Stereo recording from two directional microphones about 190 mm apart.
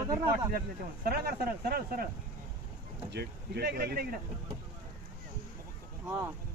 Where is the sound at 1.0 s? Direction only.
55° right (ahead or behind).